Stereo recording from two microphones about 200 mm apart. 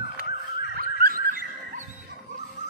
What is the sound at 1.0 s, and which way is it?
Dog, 45° right (ahead or behind).